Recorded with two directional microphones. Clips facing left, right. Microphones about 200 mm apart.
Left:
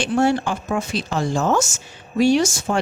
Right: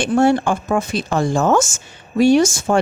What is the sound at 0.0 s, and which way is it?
A woman's voice, 50° right (ahead or behind).